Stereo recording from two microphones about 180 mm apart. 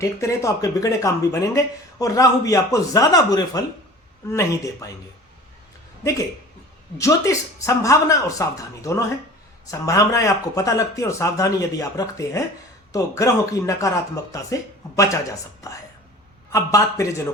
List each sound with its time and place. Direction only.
0.0 s speech: 15° left (ahead or behind)
6.0 s speech: 15° left (ahead or behind)